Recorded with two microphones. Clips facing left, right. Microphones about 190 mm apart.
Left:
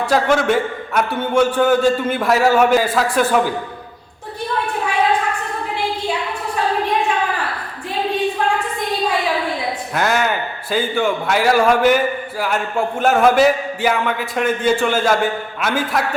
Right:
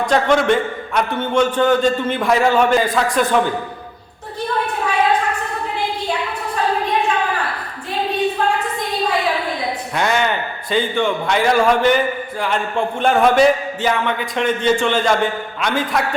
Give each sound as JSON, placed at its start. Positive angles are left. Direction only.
{"t": 0.0, "sound": "a man's voice", "side_deg": 5}
{"t": 9.9, "sound": "a man's voice", "side_deg": 5}